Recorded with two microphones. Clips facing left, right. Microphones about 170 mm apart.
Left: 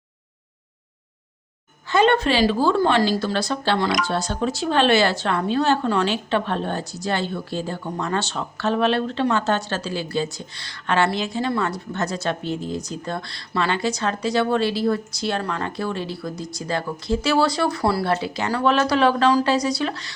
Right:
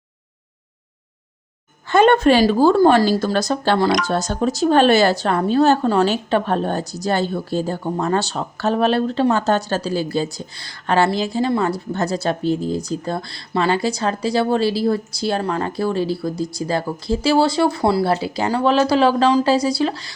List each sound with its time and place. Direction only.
1.9 s speech: 50° right (ahead or behind); by 20.1 s 35° right (ahead or behind)